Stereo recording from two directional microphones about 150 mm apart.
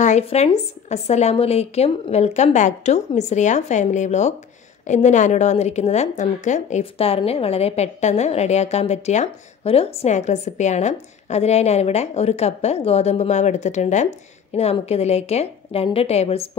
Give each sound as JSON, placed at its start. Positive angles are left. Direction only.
{"t": 0.0, "sound": "a woman's voice", "side_deg": 50}